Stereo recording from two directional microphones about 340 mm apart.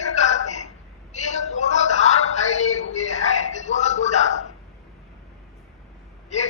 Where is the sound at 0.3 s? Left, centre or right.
Left.